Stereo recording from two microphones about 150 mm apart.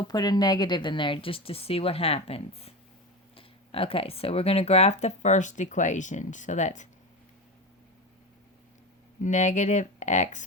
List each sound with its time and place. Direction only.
0.1 s speech: 25° left (ahead or behind); by 6.8 s 55° left (ahead or behind)
9.2 s speech: 55° left (ahead or behind)